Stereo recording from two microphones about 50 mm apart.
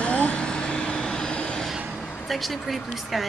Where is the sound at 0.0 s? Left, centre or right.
Left.